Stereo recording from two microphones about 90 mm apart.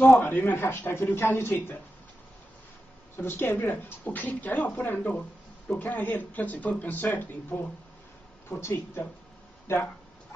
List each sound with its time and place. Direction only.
0.0 s a woman's voice: 20° left (ahead or behind)
3.2 s a woman's voice: 25° left (ahead or behind)
8.5 s a woman's voice: 30° left (ahead or behind)